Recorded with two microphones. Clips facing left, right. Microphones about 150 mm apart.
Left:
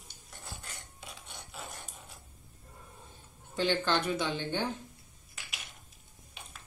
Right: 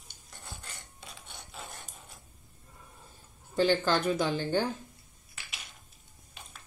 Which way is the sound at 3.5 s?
40° right (ahead or behind).